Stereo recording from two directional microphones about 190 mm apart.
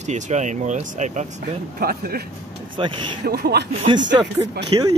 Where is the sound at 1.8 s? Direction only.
50° right (ahead or behind).